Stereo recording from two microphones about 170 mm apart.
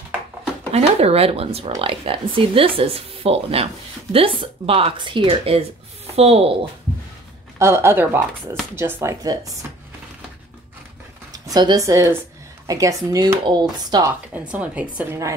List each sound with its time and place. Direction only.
0.7 s speech: 40° right (ahead or behind)
7.5 s a woman's voice: 15° right (ahead or behind)
11.3 s a woman's voice: 20° right (ahead or behind)
14.3 s a woman's voice: 10° right (ahead or behind)